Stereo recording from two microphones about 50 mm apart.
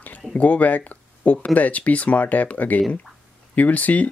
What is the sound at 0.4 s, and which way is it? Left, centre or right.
Speech, left.